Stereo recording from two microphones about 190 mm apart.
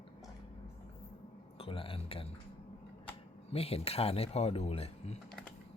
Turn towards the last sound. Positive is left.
turn(degrees=35)  # may be behind; listen again after turning